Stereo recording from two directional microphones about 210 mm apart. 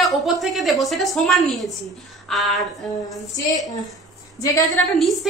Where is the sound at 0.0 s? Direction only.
Centre (ahead or behind).